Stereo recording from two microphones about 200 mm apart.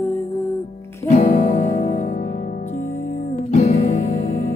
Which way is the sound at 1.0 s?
40° left (ahead or behind).